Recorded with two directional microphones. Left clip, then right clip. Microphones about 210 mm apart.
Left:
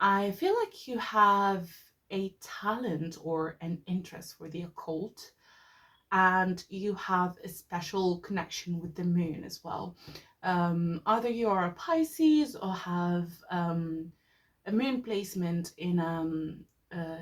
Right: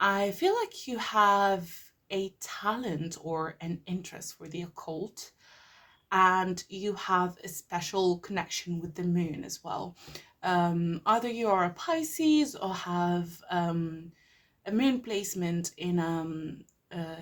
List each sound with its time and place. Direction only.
0.0 s speech: 40° right (ahead or behind)